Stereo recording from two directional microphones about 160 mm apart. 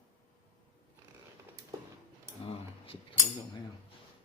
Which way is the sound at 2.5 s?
35° left (ahead or behind).